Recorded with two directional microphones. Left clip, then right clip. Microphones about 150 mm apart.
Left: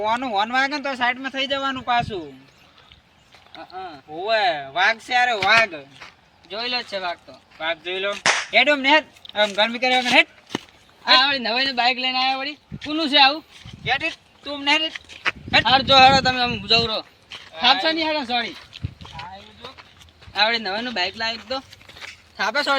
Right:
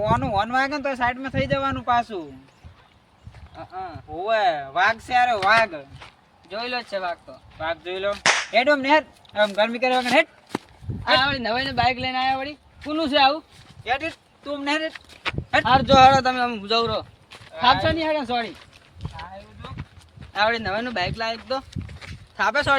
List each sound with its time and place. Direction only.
0.0 s speech: 15° right (ahead or behind)
3.5 s speech: 5° right (ahead or behind)
8.2 s whip: centre (ahead or behind)
8.5 s speech: 15° right (ahead or behind)
10.0 s speech: 5° right (ahead or behind)
13.8 s speech: 15° right (ahead or behind)
15.1 s sheep: 10° right (ahead or behind)
15.6 s speech: 10° right (ahead or behind)
20.3 s speech: centre (ahead or behind)
22.4 s speech: 10° right (ahead or behind)